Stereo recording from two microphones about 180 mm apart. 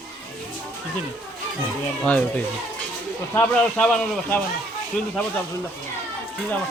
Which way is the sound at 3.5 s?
5° left (ahead or behind).